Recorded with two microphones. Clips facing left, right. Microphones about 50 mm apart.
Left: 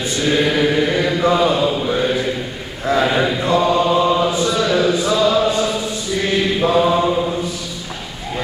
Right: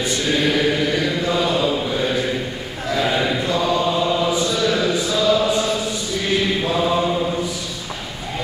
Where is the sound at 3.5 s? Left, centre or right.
Left.